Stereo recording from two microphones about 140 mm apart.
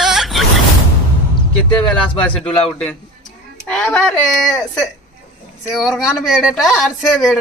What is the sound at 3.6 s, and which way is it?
Speech, 5° left (ahead or behind).